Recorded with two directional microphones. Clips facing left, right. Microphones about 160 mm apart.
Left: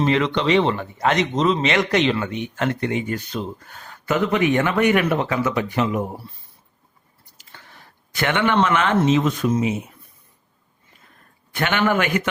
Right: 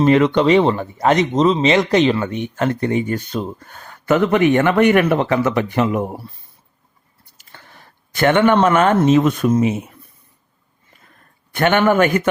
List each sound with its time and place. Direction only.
0.0 s speech: 50° right (ahead or behind)
8.1 s speech: 45° right (ahead or behind)
11.5 s speech: 50° right (ahead or behind)